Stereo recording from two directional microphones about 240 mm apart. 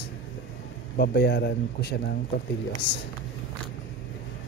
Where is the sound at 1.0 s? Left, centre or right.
Left.